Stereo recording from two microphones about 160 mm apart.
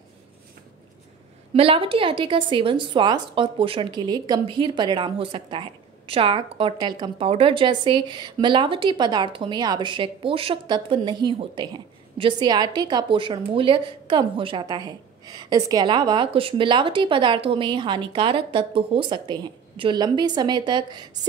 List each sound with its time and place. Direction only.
1.5 s a woman's voice: 35° right (ahead or behind)